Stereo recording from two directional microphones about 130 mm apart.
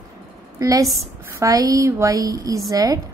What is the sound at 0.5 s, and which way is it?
A woman's voice, 25° right (ahead or behind).